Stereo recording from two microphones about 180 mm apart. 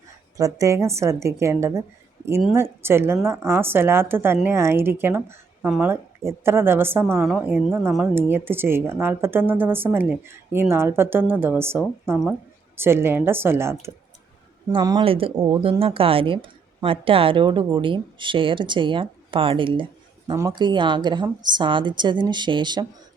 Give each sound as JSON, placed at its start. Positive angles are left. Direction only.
{"t": 0.3, "sound": "speech", "side_deg": -20}
{"t": 7.2, "sound": "a woman's voice", "side_deg": 0}
{"t": 7.4, "sound": "a woman's voice", "side_deg": -10}
{"t": 15.4, "sound": "a woman's voice", "side_deg": -20}
{"t": 15.6, "sound": "a woman's voice", "side_deg": -30}
{"t": 20.3, "sound": "a woman's voice", "side_deg": -15}